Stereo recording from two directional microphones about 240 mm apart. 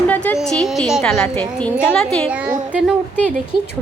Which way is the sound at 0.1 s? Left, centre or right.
Centre.